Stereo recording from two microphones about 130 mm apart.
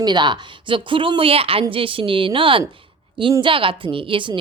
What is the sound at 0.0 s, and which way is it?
A woman's voice, 35° right (ahead or behind).